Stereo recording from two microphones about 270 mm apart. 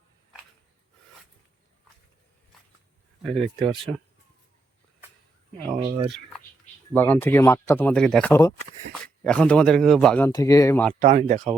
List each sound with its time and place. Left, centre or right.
3.2 s speech: centre
5.6 s speech: centre
6.9 s speech: centre
11.0 s speech: right